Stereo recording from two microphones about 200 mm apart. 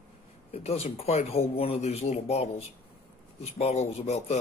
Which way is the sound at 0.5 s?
30° left (ahead or behind).